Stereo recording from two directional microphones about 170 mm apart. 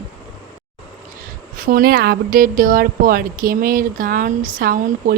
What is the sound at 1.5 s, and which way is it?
A woman's voice, 55° right (ahead or behind).